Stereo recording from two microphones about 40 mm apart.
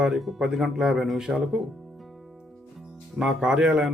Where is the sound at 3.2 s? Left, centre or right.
Centre.